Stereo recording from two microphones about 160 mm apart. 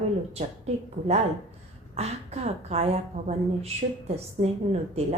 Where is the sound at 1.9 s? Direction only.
40° right (ahead or behind).